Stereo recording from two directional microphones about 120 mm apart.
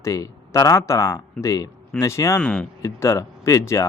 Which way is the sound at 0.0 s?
30° left (ahead or behind).